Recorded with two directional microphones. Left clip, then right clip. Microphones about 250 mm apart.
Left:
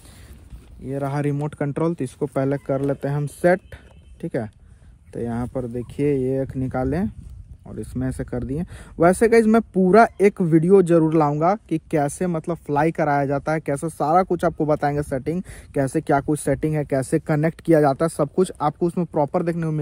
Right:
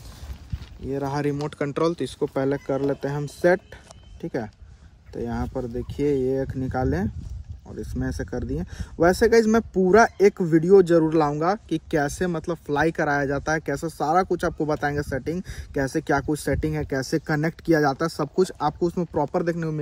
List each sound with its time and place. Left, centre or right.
0.8 s speech: left